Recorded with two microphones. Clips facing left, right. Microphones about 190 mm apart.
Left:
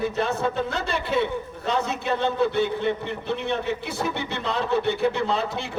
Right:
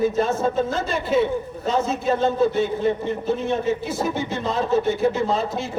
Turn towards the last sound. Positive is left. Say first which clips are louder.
# right 3 dB
turn(degrees=65)  # may be behind; listen again after turning